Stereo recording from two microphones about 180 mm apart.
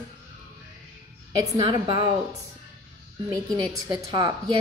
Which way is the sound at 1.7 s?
25° right (ahead or behind).